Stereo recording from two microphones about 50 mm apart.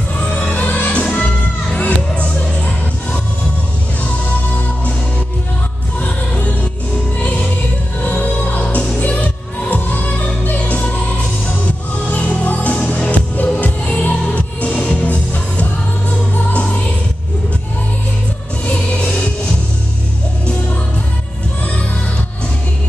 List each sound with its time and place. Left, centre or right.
0.4 s music: left
5.9 s music: left
18.7 s music: left